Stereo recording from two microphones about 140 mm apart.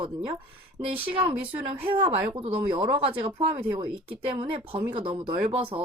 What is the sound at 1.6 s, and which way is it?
Speech, 40° right (ahead or behind).